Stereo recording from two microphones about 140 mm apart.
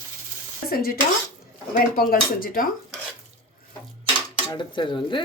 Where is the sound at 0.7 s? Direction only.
90° left.